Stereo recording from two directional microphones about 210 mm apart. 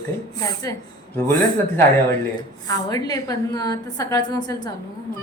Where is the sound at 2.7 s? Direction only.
15° left (ahead or behind).